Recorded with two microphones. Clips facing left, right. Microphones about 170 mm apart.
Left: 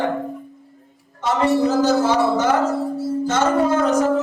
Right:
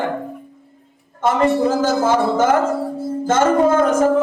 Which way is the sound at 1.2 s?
55° right (ahead or behind).